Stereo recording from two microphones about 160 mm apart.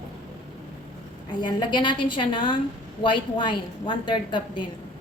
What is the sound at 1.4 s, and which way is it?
A woman's voice, 30° left (ahead or behind).